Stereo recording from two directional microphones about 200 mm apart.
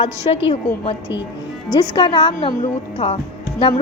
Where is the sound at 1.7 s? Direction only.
20° left (ahead or behind).